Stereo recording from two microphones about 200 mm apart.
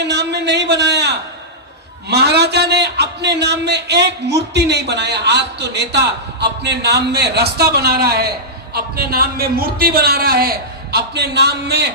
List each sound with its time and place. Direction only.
0.0 s a man's voice: 60° right (ahead or behind)